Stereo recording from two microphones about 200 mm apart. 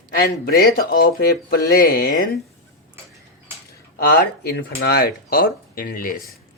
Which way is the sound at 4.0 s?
50° left (ahead or behind).